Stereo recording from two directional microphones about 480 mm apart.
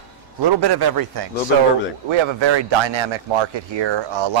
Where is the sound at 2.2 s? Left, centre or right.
Right.